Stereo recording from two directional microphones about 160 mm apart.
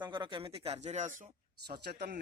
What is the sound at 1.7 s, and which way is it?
Speech, 85° right.